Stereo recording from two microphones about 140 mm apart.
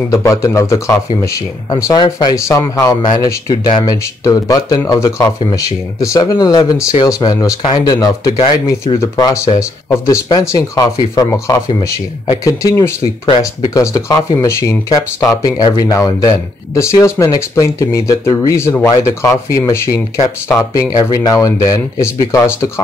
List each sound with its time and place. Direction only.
0.1 s speech: 20° left (ahead or behind)
8.4 s speech: 45° left (ahead or behind)
9.1 s speech: 25° left (ahead or behind)